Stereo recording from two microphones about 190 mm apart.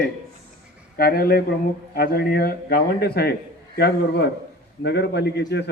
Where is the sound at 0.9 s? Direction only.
50° left (ahead or behind).